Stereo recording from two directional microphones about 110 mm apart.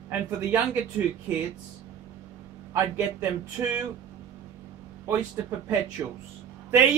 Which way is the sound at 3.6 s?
25° right (ahead or behind).